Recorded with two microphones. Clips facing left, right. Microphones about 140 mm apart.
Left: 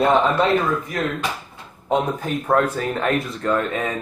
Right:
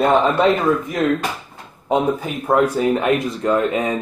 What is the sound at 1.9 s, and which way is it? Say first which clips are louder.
Speech: right 2 dB; 10° right (ahead or behind).